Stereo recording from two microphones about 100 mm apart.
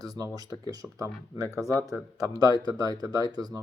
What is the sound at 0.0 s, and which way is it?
Speech, 40° right (ahead or behind).